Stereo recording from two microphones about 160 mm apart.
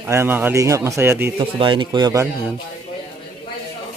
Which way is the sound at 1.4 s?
30° right (ahead or behind).